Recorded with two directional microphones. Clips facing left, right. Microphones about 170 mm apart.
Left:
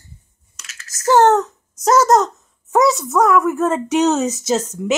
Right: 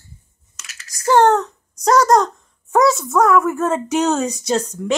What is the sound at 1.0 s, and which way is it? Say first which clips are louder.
A child's voice: left 1 dB; 5° left (ahead or behind).